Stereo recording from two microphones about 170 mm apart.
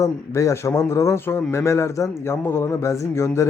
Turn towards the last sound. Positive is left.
turn(degrees=15)  # may be behind; listen again after turning